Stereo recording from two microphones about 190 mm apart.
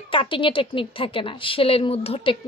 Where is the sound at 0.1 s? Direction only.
25° left (ahead or behind).